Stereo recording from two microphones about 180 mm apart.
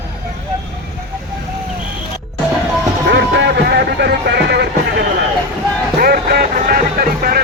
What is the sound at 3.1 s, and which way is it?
Music, 70° right (ahead or behind).